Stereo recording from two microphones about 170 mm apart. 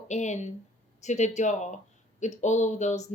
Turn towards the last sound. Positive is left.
turn(degrees=45)  # may be behind; listen again after turning